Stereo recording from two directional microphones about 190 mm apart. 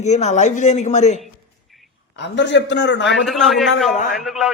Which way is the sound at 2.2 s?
70° left (ahead or behind).